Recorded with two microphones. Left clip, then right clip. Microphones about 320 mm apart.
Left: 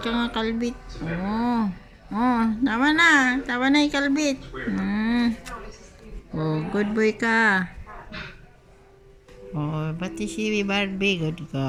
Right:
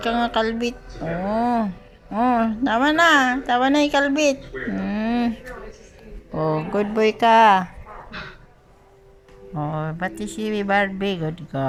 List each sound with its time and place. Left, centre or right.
0.1 s speech: centre
4.8 s a sound: centre
6.3 s speech: centre
9.6 s speech: centre